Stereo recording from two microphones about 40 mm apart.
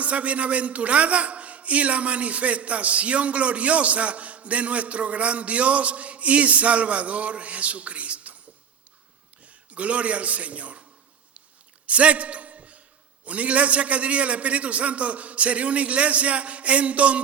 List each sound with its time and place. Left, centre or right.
0.0 s a man's voice: right
9.7 s a man's voice: right
11.9 s a sound: right
13.2 s a man's voice: right